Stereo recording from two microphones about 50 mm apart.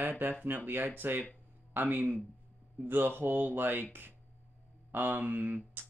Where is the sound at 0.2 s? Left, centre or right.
Right.